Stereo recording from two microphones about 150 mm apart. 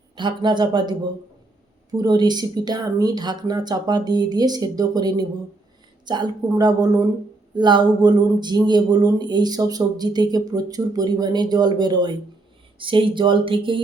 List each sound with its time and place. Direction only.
0.2 s speech: 30° right (ahead or behind)